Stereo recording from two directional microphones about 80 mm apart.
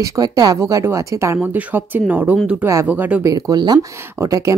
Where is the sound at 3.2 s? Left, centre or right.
Right.